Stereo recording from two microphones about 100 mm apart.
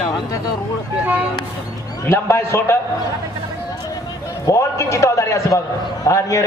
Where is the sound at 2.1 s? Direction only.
25° left (ahead or behind).